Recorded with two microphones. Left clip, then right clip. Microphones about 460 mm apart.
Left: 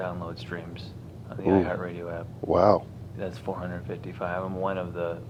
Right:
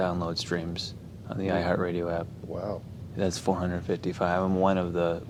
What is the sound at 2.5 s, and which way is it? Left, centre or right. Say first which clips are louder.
Speech: left 16 dB; left.